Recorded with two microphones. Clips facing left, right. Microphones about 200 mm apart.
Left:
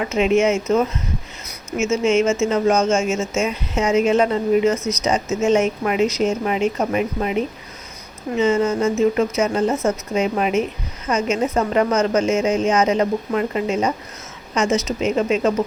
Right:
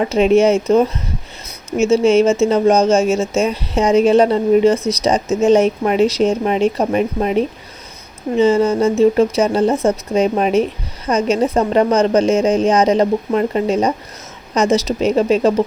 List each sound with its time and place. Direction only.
0.0 s speech: 35° right (ahead or behind)